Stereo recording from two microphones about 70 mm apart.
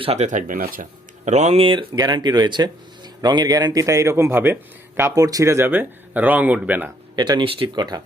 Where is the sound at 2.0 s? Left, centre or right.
Right.